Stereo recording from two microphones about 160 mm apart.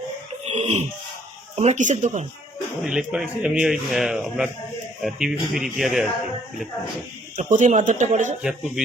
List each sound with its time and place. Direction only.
0.4 s a sound: 40° right (ahead or behind)
1.5 s speech: 45° right (ahead or behind)
2.8 s speech: 5° right (ahead or behind)
7.3 s speech: 50° right (ahead or behind)
8.4 s speech: 5° right (ahead or behind)